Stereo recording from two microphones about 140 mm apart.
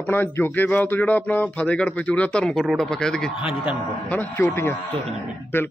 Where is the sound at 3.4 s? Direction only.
10° right (ahead or behind).